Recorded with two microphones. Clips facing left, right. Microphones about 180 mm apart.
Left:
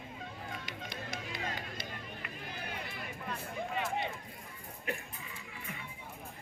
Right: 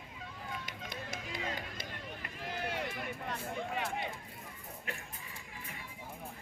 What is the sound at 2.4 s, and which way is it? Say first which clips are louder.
Run: right 7 dB; 90° right.